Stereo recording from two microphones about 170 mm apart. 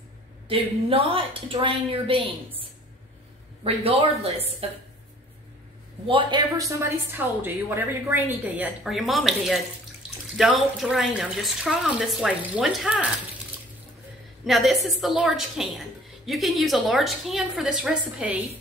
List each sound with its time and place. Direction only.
0.5 s a woman's voice: 30° right (ahead or behind)
4.6 s a woman's voice: 35° right (ahead or behind)
6.0 s a woman's voice: 30° right (ahead or behind); by 13.1 s 5° right (ahead or behind)
14.4 s speech: centre (ahead or behind)